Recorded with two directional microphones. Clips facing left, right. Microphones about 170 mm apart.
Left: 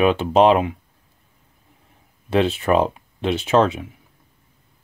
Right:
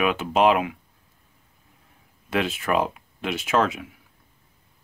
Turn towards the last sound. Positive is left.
turn(degrees=30)  # may be behind; listen again after turning